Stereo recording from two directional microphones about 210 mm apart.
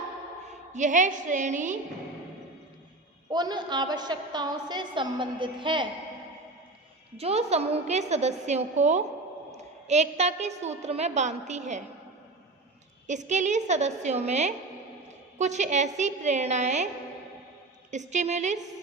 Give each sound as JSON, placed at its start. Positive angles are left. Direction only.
{"t": 0.7, "sound": "a woman's voice", "side_deg": -35}
{"t": 3.2, "sound": "a woman's voice", "side_deg": -20}
{"t": 7.2, "sound": "a woman's voice", "side_deg": -30}
{"t": 13.1, "sound": "a woman's voice", "side_deg": -35}
{"t": 17.9, "sound": "a woman's voice", "side_deg": -35}